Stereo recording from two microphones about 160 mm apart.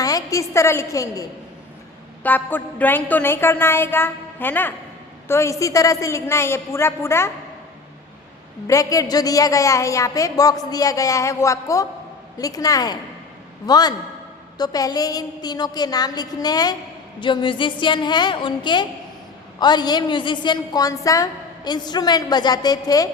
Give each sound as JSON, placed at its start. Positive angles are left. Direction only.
{"t": 0.0, "sound": "a woman's voice", "side_deg": 25}
{"t": 8.6, "sound": "a woman's voice", "side_deg": 20}